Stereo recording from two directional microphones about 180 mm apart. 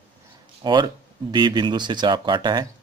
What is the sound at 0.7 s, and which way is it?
Speech, 25° right (ahead or behind).